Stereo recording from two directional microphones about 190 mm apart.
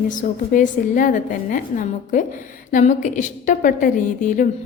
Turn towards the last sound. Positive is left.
turn(degrees=45)  # may be behind; listen again after turning